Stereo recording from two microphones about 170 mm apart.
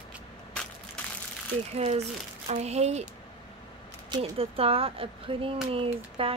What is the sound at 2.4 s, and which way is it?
Speech, 40° right (ahead or behind).